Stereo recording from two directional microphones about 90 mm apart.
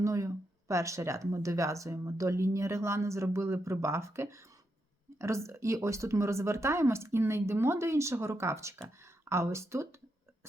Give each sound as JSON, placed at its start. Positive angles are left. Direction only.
{"t": 0.0, "sound": "speech", "side_deg": -35}